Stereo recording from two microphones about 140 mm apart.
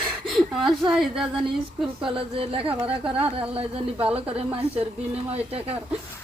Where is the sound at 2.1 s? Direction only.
40° right (ahead or behind).